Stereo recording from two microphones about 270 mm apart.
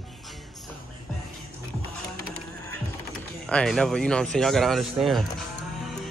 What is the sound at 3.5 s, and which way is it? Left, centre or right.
Speech, centre.